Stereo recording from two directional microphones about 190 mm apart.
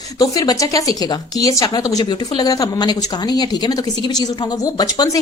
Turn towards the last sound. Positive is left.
turn(degrees=20)  # may be behind; listen again after turning